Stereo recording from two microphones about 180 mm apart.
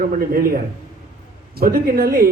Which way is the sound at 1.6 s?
55° right (ahead or behind).